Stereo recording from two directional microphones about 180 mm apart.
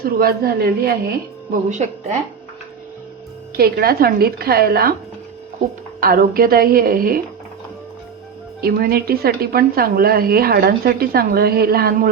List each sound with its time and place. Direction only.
0.0 s a woman's voice: 55° right (ahead or behind)
1.7 s speech: 40° right (ahead or behind)
3.6 s a woman's voice: 60° right (ahead or behind)
6.0 s a woman's voice: 55° right (ahead or behind)
8.6 s a woman's voice: 55° right (ahead or behind)